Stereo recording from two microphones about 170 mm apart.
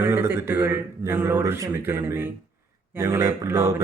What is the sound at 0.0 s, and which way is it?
Speech, 15° right (ahead or behind).